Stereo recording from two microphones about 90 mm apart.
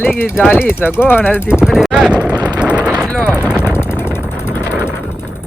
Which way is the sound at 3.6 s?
30° left (ahead or behind).